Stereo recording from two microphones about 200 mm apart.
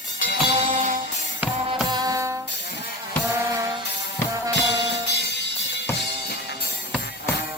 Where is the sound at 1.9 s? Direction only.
20° right (ahead or behind).